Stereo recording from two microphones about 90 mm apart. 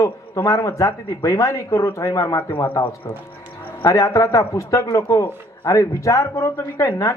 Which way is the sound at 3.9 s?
40° left (ahead or behind).